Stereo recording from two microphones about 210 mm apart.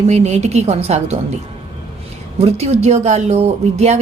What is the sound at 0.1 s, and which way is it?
A woman's voice, 30° right (ahead or behind).